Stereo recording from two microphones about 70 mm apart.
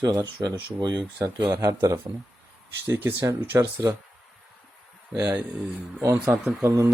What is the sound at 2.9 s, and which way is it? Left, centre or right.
Speech, right.